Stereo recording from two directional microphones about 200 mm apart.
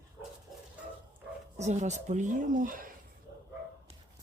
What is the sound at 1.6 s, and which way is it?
Speech, 35° right (ahead or behind).